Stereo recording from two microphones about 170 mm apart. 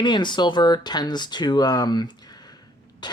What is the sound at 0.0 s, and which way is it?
Speech, 25° left (ahead or behind).